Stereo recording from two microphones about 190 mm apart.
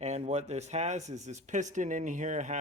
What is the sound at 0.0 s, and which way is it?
Speech, 35° right (ahead or behind).